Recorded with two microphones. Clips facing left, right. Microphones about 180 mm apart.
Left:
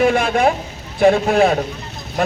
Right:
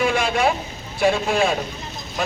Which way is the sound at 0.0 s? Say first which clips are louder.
Left 5 dB; 55° left (ahead or behind).